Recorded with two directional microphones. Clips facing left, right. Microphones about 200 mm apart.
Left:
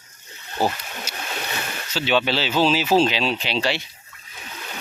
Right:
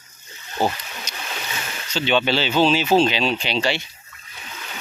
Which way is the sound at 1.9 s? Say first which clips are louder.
Right 1 dB; 5° left (ahead or behind).